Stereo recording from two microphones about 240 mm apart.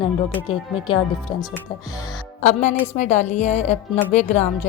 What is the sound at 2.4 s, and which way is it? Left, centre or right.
Speech, left.